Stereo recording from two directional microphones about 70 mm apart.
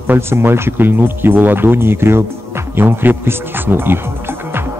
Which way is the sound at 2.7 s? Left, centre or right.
Right.